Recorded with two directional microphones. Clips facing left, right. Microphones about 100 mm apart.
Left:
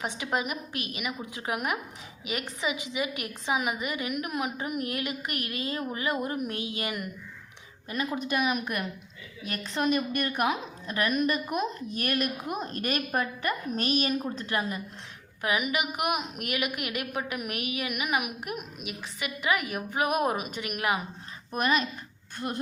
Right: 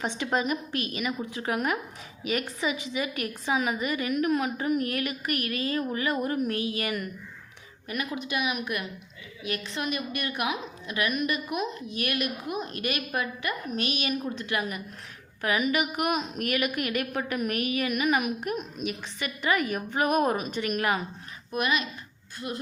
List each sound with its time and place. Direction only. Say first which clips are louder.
0.0 s a woman's voice: right 3 dB; 10° left (ahead or behind)
8.1 s a woman's voice: left 3 dB; 45° left (ahead or behind)
15.4 s a woman's voice: right 2 dB; 15° left (ahead or behind)
21.5 s a woman's voice: left 1 dB; 40° left (ahead or behind)